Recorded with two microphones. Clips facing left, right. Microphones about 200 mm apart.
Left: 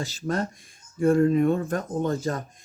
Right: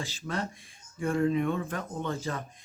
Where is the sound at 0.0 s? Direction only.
40° left (ahead or behind).